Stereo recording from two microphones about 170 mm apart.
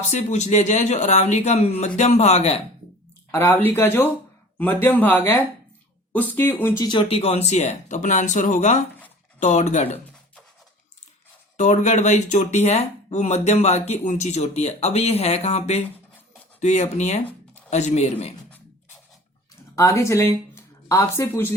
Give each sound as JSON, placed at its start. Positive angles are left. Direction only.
{"t": 0.1, "sound": "speech", "side_deg": 45}
{"t": 3.3, "sound": "speech", "side_deg": 15}
{"t": 6.8, "sound": "speech", "side_deg": 30}
{"t": 11.5, "sound": "a man's voice", "side_deg": 45}
{"t": 19.7, "sound": "speech", "side_deg": 15}